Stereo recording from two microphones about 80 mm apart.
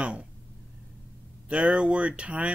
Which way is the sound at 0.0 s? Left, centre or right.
Centre.